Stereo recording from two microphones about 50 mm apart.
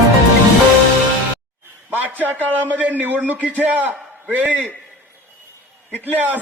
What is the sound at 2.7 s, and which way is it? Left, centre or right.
A man's voice, right.